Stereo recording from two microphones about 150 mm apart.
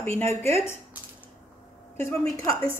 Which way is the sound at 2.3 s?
20° left (ahead or behind).